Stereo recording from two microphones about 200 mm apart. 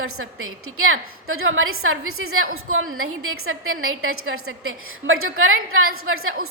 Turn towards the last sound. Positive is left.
turn(degrees=-90)